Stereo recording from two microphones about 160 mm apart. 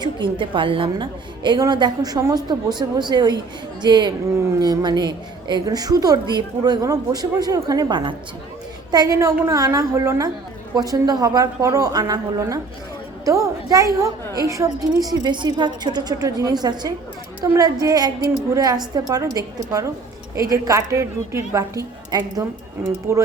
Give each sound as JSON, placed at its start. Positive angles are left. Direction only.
{"t": 0.0, "sound": "a woman's voice", "side_deg": -30}